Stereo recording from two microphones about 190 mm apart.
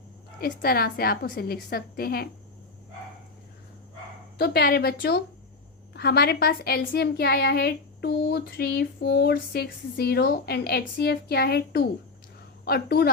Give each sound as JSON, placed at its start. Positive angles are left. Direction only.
{"t": 0.3, "sound": "a woman's voice", "side_deg": 50}
{"t": 4.4, "sound": "a woman's voice", "side_deg": 55}